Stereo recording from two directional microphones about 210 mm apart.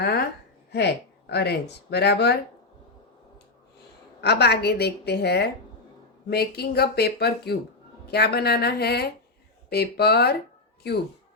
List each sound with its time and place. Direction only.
1.3 s a woman's voice: 50° left (ahead or behind)
4.2 s a woman's voice: 50° left (ahead or behind)